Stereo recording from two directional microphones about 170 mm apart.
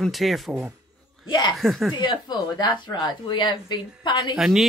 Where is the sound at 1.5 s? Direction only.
Centre (ahead or behind).